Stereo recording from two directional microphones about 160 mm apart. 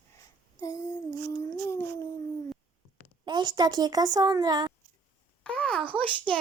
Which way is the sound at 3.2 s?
25° right (ahead or behind).